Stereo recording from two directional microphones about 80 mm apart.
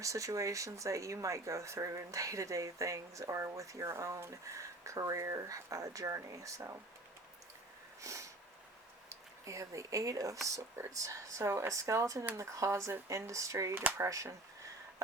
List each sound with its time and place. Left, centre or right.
0.0 s speech: right
8.0 s sniff: right
9.0 s speech: right